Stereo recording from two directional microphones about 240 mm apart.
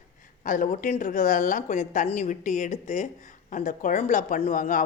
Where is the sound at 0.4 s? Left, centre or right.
Left.